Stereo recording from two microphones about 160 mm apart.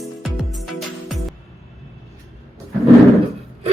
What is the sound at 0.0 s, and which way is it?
Music, centre (ahead or behind).